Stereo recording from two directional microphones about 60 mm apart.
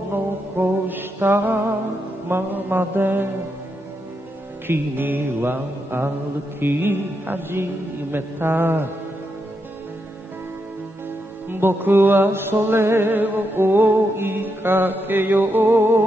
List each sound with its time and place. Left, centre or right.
0.1 s music: right
4.6 s music: right
11.4 s music: right